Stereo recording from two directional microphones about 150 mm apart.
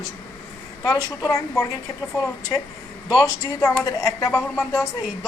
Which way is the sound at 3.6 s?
25° left (ahead or behind).